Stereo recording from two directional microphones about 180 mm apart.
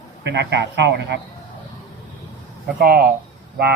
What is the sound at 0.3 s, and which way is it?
Speech, 75° right (ahead or behind).